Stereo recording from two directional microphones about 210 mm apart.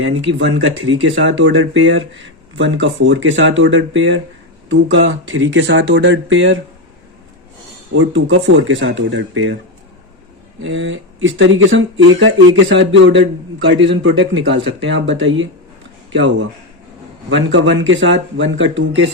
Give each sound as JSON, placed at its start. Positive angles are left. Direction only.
{"t": 0.0, "sound": "speech", "side_deg": -65}
{"t": 7.9, "sound": "speech", "side_deg": -70}
{"t": 10.6, "sound": "speech", "side_deg": -65}